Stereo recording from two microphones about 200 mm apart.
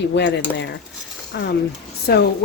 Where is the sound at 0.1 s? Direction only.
60° left (ahead or behind).